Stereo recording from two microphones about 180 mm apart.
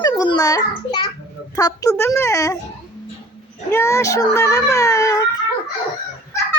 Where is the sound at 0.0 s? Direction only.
20° left (ahead or behind).